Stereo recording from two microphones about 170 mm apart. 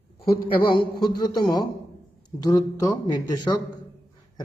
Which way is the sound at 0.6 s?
30° left (ahead or behind).